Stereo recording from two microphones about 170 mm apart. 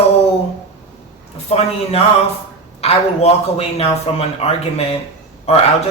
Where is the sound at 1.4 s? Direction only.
35° left (ahead or behind).